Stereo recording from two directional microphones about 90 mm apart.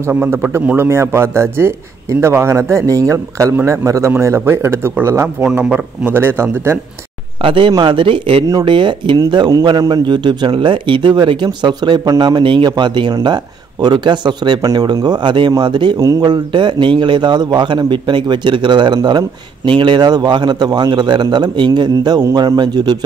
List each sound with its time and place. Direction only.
0.1 s a man's voice: 20° right (ahead or behind)
5.4 s a man's voice: 15° right (ahead or behind)
7.4 s a man's voice: 70° right (ahead or behind)
9.2 s a man's voice: 50° right (ahead or behind)
14.6 s a man's voice: 40° right (ahead or behind)
15.0 s a man's voice: 55° right (ahead or behind)
22.2 s speech: 40° right (ahead or behind)